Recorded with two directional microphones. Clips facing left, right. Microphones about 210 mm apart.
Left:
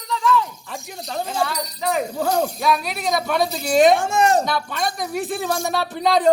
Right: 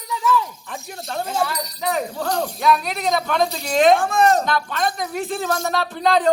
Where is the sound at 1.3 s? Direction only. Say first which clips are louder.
Right 1 dB; centre (ahead or behind).